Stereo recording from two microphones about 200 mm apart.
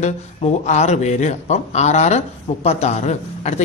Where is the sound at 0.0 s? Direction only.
35° left (ahead or behind).